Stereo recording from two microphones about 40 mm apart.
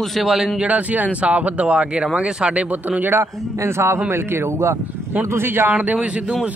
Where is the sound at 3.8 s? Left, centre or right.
Right.